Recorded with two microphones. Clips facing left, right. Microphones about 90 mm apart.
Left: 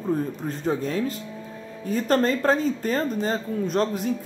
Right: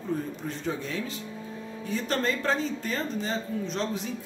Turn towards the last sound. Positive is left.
turn(degrees=45)  # may be behind; listen again after turning